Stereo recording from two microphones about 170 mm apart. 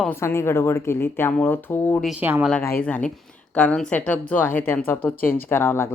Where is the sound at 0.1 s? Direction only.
15° left (ahead or behind).